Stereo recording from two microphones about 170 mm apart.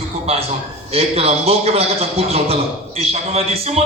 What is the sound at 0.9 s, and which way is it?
A man's voice, 35° right (ahead or behind).